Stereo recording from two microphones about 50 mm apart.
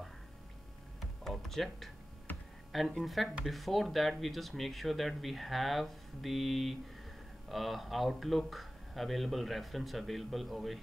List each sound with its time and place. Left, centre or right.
1.2 s music: centre
2.3 s computer keyboard: left
2.7 s speech: centre